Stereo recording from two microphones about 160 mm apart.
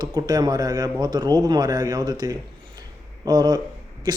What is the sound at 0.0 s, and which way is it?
Speech, 25° right (ahead or behind).